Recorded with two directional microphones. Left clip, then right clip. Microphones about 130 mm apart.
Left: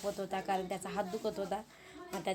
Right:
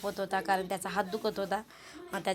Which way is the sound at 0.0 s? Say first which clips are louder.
Right 5 dB; 15° right (ahead or behind).